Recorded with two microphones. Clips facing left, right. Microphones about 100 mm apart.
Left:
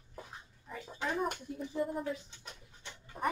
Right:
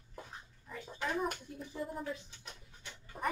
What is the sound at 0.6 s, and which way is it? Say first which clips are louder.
Speech: left 1 dB; 20° left (ahead or behind).